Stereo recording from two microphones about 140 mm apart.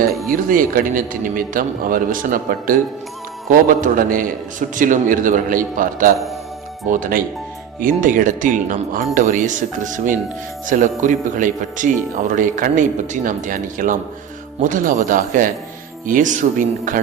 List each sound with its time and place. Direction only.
0.3 s a man's voice: 80° right
3.8 s speech: 70° right (ahead or behind)